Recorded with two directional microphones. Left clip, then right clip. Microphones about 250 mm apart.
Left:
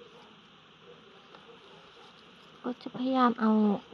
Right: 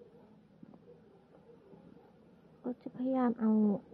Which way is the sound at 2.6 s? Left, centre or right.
Left.